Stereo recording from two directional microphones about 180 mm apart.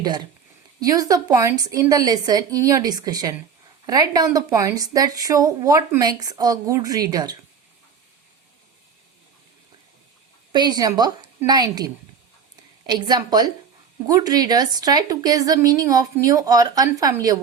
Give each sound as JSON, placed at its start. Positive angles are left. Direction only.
{"t": 0.8, "sound": "a woman's voice", "side_deg": -20}
{"t": 10.5, "sound": "a woman's voice", "side_deg": -25}